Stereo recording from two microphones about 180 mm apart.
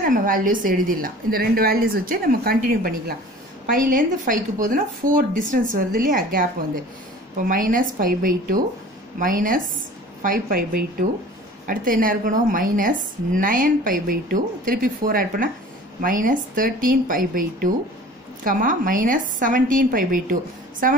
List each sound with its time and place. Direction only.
0.0 s speech: 50° right (ahead or behind)